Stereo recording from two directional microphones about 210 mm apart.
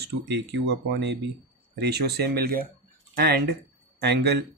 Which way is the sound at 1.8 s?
50° right (ahead or behind).